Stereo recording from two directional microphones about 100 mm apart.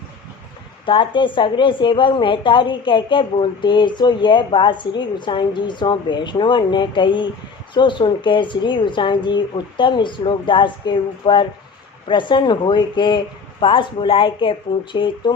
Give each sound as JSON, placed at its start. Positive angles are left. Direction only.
{"t": 0.9, "sound": "a woman's voice", "side_deg": 55}